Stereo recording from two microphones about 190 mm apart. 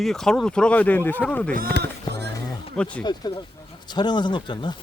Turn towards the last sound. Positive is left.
turn(degrees=25)  # may be behind; listen again after turning